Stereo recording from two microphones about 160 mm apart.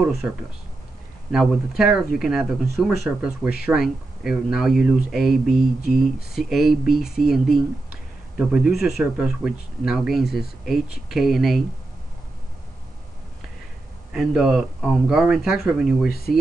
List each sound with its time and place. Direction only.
0.2 s speech: 5° right (ahead or behind)
14.1 s speech: centre (ahead or behind)